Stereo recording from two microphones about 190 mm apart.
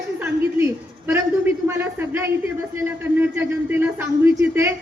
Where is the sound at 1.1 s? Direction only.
10° right (ahead or behind).